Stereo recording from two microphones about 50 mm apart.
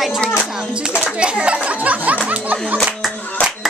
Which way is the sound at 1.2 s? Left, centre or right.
Right.